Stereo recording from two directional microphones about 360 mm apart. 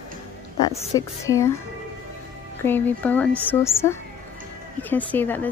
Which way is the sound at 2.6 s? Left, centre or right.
Centre.